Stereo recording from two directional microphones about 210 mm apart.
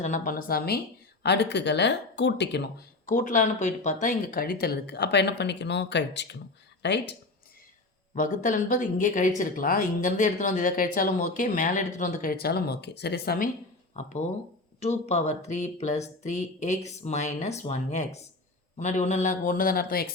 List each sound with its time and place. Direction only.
0.0 s speech: 40° left (ahead or behind); by 7.2 s 55° left (ahead or behind)
8.1 s speech: 40° left (ahead or behind)
13.9 s speech: 35° left (ahead or behind)